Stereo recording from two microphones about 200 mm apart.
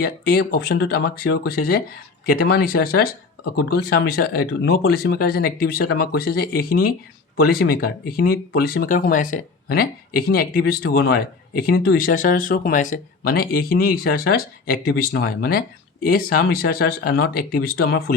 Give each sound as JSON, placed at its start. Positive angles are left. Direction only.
{"t": 0.0, "sound": "speech", "side_deg": 50}